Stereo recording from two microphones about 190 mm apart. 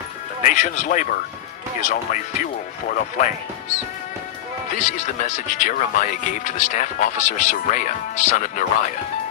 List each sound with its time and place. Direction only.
0.4 s speech: 40° left (ahead or behind)
4.8 s speech: 40° left (ahead or behind)